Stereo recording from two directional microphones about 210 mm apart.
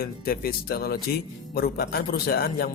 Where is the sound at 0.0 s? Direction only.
45° left (ahead or behind).